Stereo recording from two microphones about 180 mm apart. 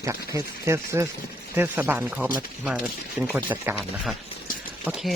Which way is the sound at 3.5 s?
10° right (ahead or behind).